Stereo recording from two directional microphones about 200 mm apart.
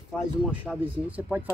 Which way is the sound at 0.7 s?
Centre (ahead or behind).